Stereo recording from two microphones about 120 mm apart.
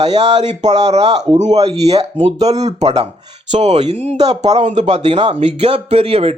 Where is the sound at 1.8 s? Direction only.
60° right (ahead or behind).